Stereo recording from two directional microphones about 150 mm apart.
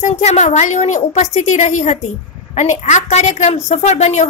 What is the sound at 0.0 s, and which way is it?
A woman's voice, 50° left (ahead or behind).